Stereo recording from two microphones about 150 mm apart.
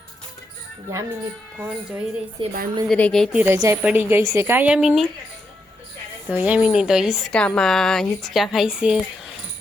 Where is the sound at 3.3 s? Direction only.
10° right (ahead or behind).